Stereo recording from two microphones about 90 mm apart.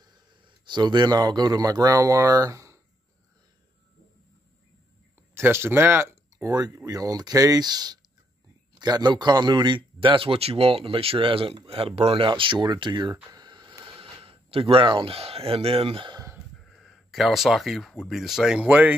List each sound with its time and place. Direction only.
0.0 s speech: 55° right (ahead or behind); by 2.8 s 35° right (ahead or behind)
5.3 s speech: 30° right (ahead or behind)
6.9 s speech: 45° right (ahead or behind); by 11.5 s 75° right (ahead or behind)
11.6 s speech: 90° right; by 13.1 s 60° right (ahead or behind)
13.1 s a sound: 50° right (ahead or behind)
13.9 s speech: 90° right
16.6 s speech: centre (ahead or behind)
18.6 s speech: 15° right (ahead or behind)